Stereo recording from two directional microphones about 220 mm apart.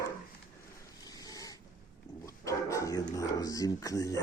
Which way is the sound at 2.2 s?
15° left (ahead or behind).